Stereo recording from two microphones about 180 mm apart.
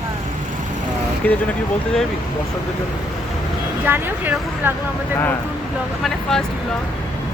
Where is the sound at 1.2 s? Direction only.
5° left (ahead or behind).